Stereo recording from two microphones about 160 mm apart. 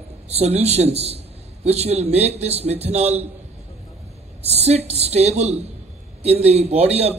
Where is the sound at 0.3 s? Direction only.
40° right (ahead or behind).